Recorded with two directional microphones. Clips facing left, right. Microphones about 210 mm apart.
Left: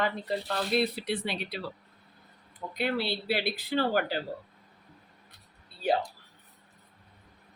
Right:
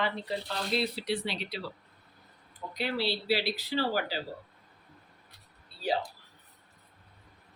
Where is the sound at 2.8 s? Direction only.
55° left (ahead or behind).